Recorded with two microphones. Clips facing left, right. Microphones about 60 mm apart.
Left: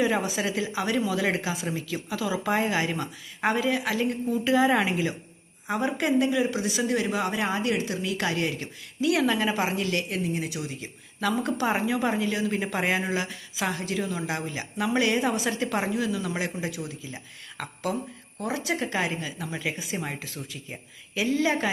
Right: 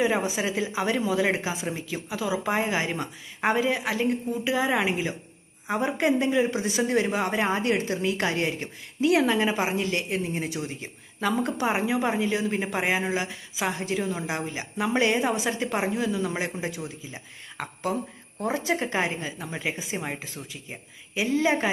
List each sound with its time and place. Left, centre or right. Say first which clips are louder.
0.0 s a woman's voice: right 1 dB; right